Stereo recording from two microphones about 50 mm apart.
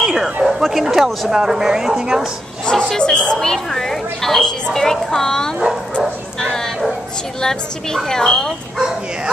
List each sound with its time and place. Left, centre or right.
0.0 s bow-wow: centre
0.4 s speech: centre
2.7 s a sound: centre
3.0 s a woman's voice: centre
3.3 s a woman's voice: centre
6.4 s bow-wow: centre
7.4 s a woman's voice: centre